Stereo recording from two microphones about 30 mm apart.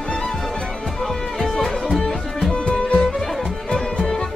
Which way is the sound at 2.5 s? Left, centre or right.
Left.